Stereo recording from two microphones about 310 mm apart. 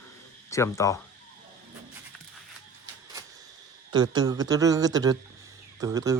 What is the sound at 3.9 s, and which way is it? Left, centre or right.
Speech, centre.